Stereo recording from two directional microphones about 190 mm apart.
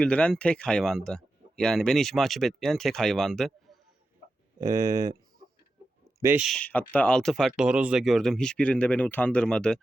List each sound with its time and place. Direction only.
0.0 s speech: 5° left (ahead or behind)
4.6 s speech: 20° right (ahead or behind)
6.2 s speech: 5° right (ahead or behind)